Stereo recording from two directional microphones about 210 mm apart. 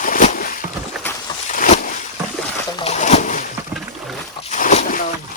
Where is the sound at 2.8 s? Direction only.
35° left (ahead or behind).